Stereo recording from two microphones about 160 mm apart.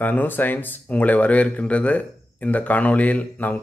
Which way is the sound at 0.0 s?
10° left (ahead or behind).